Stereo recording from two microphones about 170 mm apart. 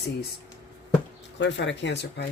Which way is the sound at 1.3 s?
90° left.